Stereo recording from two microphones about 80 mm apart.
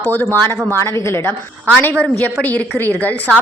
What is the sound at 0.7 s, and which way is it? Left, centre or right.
Speech, left.